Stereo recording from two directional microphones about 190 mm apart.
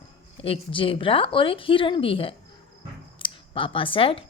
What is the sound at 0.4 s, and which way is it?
A woman's voice, 30° left (ahead or behind).